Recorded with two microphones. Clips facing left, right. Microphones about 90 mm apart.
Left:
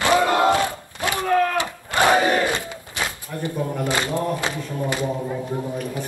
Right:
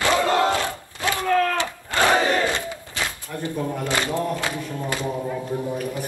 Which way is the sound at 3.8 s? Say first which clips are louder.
Left 1 dB; 20° left (ahead or behind).